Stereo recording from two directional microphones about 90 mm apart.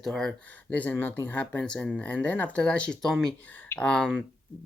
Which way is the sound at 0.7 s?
20° left (ahead or behind).